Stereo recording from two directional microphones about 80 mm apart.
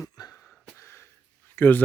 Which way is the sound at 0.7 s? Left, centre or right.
Left.